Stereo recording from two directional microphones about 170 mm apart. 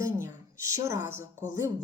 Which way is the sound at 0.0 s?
15° right (ahead or behind).